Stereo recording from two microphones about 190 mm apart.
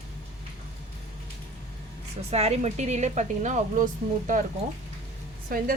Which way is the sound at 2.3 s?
35° right (ahead or behind).